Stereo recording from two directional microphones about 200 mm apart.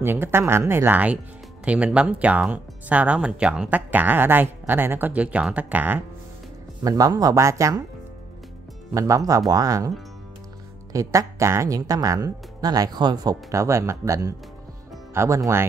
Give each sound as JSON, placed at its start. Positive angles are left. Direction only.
{"t": 0.0, "sound": "speech", "side_deg": -10}
{"t": 8.9, "sound": "speech", "side_deg": -15}